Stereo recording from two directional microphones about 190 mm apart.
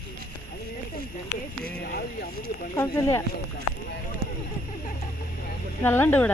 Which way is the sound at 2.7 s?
20° left (ahead or behind).